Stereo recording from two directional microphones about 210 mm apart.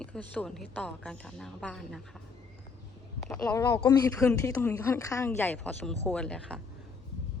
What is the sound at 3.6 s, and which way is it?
Speech, 15° left (ahead or behind).